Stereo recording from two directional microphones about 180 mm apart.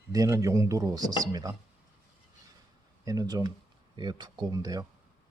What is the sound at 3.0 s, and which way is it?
Speech, 20° right (ahead or behind).